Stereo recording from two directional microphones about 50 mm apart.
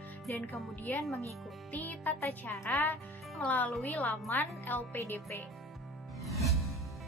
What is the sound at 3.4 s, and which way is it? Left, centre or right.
Speech, left.